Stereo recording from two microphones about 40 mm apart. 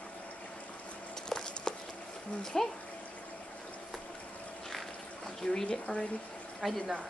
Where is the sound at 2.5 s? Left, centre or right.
Centre.